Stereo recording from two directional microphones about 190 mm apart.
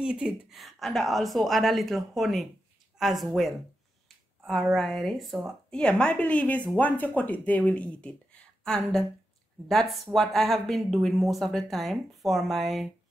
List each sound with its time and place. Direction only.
0.0 s a woman's voice: 5° right (ahead or behind)
4.7 s a woman's voice: centre (ahead or behind)